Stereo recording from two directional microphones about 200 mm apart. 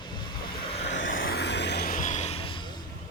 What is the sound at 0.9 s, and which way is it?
Vehicle, 65° left (ahead or behind).